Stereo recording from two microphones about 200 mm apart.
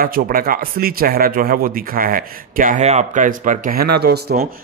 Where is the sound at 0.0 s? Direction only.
45° right (ahead or behind).